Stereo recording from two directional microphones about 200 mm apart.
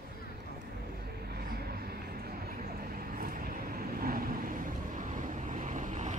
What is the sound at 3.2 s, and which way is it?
Vehicle, 45° right (ahead or behind).